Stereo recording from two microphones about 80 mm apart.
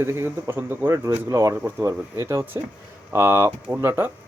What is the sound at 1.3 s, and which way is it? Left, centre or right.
Speech, right.